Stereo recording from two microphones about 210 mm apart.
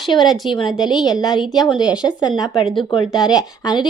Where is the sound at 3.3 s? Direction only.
20° left (ahead or behind).